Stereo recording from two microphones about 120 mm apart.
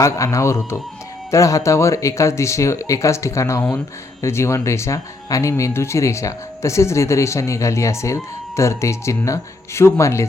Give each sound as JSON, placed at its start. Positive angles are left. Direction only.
{"t": 0.0, "sound": "speech", "side_deg": 25}